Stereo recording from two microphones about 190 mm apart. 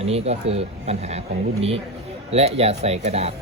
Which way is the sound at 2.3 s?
35° right (ahead or behind).